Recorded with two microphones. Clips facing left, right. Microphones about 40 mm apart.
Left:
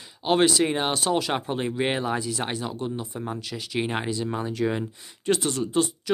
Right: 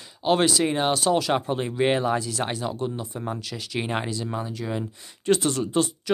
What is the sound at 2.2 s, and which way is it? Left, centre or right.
Speech, left.